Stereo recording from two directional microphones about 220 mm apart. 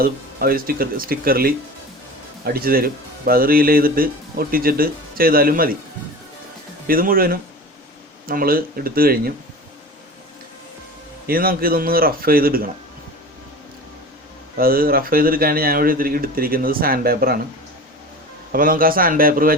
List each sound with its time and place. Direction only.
0.0 s speech: 40° right (ahead or behind)
6.8 s speech: 40° right (ahead or behind)
11.3 s speech: 40° right (ahead or behind)
14.6 s speech: 40° right (ahead or behind)
18.5 s speech: 40° right (ahead or behind)